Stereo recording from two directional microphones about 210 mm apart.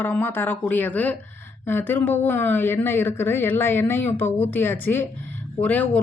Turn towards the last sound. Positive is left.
turn(degrees=5)  # may be behind; listen again after turning